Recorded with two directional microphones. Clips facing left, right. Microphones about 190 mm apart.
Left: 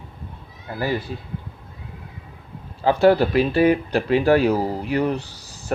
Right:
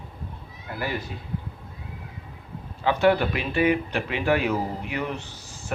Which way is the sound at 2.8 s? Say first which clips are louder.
Left 5 dB; 35° left (ahead or behind).